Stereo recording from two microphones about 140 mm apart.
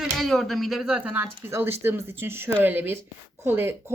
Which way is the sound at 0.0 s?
Centre (ahead or behind).